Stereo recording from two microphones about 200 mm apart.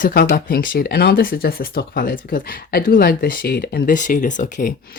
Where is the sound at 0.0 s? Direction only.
50° left (ahead or behind).